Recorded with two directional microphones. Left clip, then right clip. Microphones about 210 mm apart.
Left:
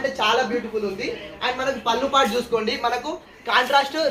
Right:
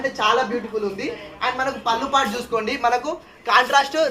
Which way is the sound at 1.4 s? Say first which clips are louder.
Right 1 dB; 25° right (ahead or behind).